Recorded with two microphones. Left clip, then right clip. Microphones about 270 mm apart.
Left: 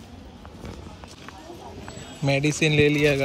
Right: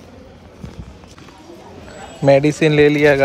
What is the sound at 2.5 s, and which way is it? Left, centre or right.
Speech, centre.